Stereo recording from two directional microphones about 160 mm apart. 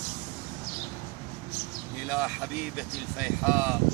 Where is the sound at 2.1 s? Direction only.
5° right (ahead or behind).